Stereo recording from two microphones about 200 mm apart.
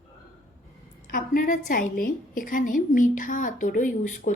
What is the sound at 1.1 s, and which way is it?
A woman's voice, 45° left (ahead or behind).